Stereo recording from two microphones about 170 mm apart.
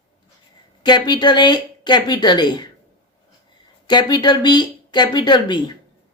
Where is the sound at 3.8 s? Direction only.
25° left (ahead or behind).